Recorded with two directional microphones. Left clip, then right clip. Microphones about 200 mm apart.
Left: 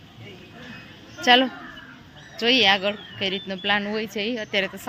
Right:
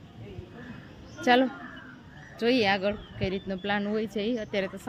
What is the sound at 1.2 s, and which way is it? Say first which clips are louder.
Speech: left 5 dB; centre (ahead or behind).